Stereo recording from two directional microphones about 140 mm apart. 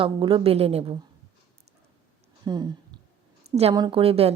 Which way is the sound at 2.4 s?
30° right (ahead or behind).